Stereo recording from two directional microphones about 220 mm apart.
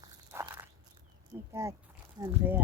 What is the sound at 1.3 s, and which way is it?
Speech, 10° right (ahead or behind).